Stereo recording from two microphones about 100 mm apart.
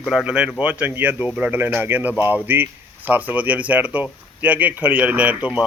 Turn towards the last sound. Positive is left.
turn(degrees=-15)  # may be behind; listen again after turning